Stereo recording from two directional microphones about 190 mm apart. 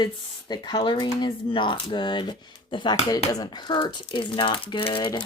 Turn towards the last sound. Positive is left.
turn(degrees=25)  # may be behind; listen again after turning